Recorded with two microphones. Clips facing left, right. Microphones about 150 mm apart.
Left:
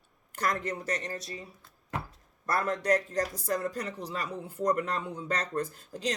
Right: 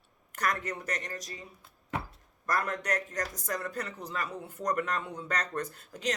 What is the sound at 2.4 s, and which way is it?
Speech, 30° left (ahead or behind).